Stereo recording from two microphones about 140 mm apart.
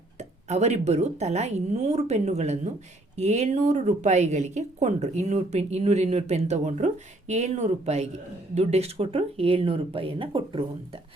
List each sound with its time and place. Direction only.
0.2 s speech: 50° right (ahead or behind)